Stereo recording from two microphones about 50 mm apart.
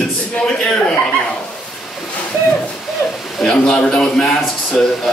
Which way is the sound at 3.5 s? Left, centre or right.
Centre.